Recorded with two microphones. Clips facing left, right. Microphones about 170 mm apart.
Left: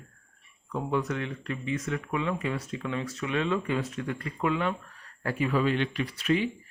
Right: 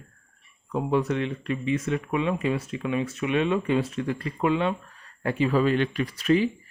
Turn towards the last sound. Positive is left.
turn(degrees=-40)  # may be behind; listen again after turning